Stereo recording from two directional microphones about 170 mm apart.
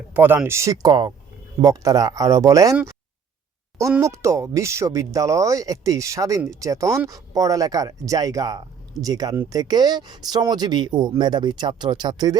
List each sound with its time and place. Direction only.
0.1 s speech: 10° right (ahead or behind)
4.0 s speech: 15° right (ahead or behind)